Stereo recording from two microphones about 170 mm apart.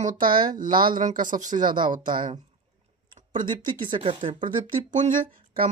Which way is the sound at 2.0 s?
25° right (ahead or behind).